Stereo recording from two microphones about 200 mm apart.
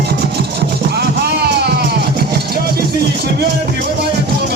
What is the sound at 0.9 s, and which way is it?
Music, 55° right (ahead or behind).